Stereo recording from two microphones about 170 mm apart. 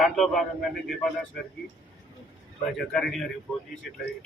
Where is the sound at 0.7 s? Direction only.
Centre (ahead or behind).